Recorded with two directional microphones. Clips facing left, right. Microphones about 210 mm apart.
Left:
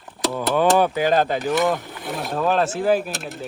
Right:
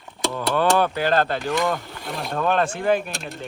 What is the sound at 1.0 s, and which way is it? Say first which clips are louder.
Speech: left 2 dB; 15° left (ahead or behind).